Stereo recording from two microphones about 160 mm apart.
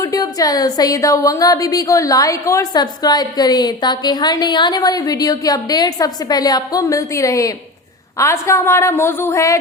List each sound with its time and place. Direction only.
0.0 s a woman's voice: 20° left (ahead or behind)